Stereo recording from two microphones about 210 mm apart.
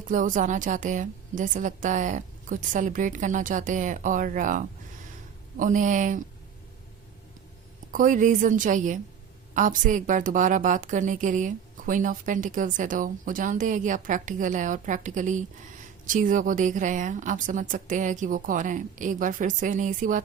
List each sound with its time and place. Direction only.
0.0 s a woman's voice: 40° right (ahead or behind)
7.9 s a woman's voice: 40° right (ahead or behind)